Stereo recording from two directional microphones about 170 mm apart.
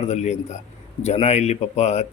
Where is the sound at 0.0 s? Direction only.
40° left (ahead or behind).